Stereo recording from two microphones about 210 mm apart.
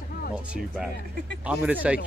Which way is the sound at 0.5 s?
Centre (ahead or behind).